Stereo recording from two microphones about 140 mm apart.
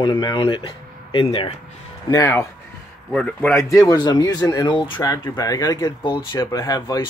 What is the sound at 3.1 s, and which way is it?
Speech, 10° left (ahead or behind).